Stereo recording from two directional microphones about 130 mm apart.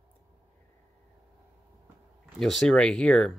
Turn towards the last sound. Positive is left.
turn(degrees=5)  # may be behind; listen again after turning